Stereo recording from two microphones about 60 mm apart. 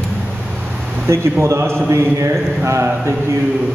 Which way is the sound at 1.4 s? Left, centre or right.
Right.